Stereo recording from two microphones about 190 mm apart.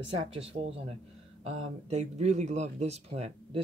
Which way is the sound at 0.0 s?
30° right (ahead or behind).